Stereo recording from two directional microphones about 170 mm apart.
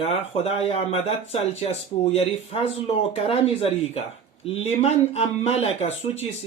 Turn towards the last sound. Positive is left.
turn(degrees=40)  # may be behind; listen again after turning